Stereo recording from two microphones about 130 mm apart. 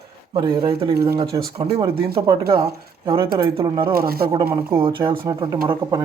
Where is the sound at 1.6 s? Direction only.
45° right (ahead or behind).